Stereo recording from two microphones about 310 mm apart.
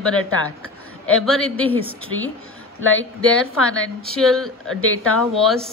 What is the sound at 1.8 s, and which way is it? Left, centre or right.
Speech, left.